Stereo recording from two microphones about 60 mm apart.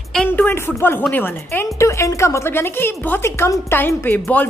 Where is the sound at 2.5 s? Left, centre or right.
Left.